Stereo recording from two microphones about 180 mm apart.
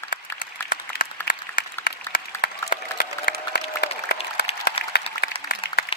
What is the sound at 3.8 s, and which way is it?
Applause, 65° left (ahead or behind).